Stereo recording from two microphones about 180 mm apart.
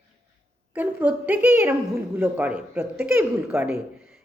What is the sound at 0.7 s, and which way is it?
A woman's voice, 10° right (ahead or behind).